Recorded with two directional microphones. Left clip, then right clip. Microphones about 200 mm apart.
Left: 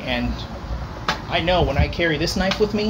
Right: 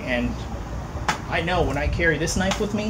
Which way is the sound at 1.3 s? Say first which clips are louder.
Left 5 dB; 35° left (ahead or behind).